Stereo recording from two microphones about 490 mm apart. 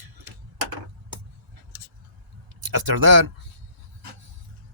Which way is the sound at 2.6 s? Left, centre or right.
Right.